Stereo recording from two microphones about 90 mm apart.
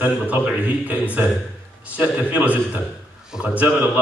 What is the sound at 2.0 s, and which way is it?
A man's voice, 15° right (ahead or behind).